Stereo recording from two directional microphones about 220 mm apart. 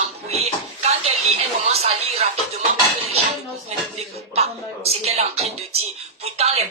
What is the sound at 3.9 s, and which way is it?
A woman's voice, 25° right (ahead or behind).